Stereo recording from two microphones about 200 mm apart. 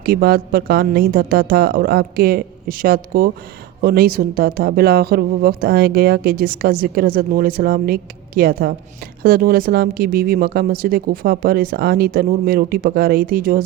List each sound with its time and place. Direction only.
0.0 s speech: 50° right (ahead or behind)